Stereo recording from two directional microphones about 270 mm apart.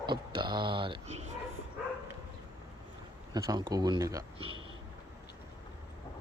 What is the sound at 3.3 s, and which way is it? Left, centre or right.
Speech, centre.